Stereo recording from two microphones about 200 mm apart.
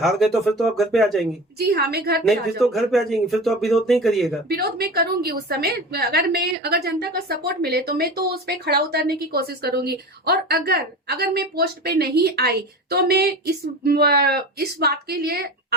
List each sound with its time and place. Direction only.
0.0 s speech: centre (ahead or behind)
1.5 s a woman's voice: 50° right (ahead or behind)
2.2 s speech: centre (ahead or behind)
4.4 s a woman's voice: 50° right (ahead or behind)